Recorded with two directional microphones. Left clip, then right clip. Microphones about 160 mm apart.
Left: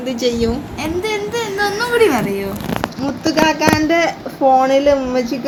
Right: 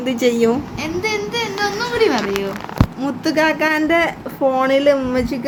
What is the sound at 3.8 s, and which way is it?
Speech, 15° right (ahead or behind).